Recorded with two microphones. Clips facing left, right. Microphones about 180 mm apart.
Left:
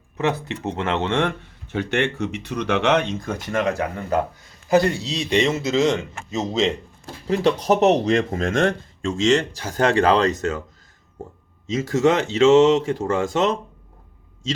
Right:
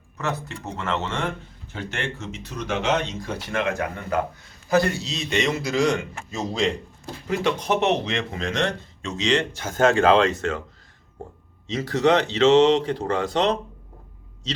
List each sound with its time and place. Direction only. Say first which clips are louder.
0.3 s speech: left 5 dB; 70° left (ahead or behind); by 6.7 s 20° left (ahead or behind)
7.3 s speech: left 5 dB; 35° left (ahead or behind)
11.7 s speech: left 1 dB; 45° left (ahead or behind)